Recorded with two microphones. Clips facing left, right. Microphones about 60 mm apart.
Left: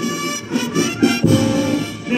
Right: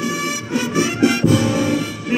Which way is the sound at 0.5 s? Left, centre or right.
Centre.